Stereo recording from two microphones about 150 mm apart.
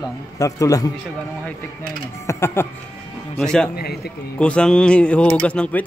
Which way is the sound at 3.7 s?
90° left.